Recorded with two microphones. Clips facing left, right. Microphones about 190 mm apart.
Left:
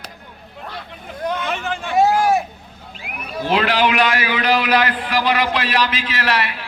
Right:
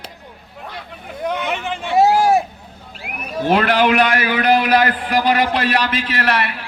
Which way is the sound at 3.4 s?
50° right (ahead or behind).